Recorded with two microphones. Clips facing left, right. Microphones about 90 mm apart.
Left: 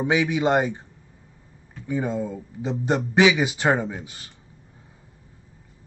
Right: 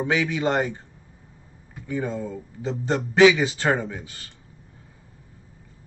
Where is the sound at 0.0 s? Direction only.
15° left (ahead or behind).